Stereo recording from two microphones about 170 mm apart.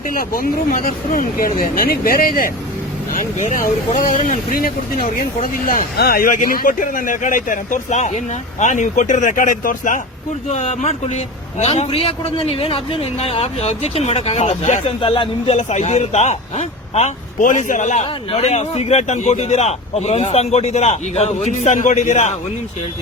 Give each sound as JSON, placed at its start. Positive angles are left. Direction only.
{"t": 0.1, "sound": "a man's voice", "side_deg": 55}